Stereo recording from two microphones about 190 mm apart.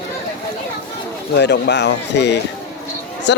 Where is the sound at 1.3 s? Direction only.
65° left (ahead or behind).